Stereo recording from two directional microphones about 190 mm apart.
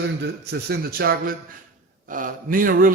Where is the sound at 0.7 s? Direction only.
55° right (ahead or behind).